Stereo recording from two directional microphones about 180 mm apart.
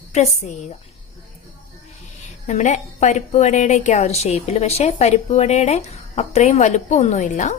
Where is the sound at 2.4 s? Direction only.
40° left (ahead or behind).